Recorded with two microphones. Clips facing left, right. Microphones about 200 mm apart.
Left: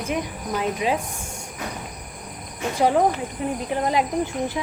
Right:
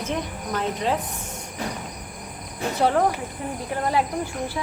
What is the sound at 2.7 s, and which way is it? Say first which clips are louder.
Cricket: left 2 dB; 15° left (ahead or behind).